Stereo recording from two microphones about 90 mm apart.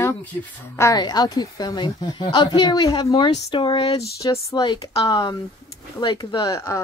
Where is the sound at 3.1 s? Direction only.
70° left (ahead or behind).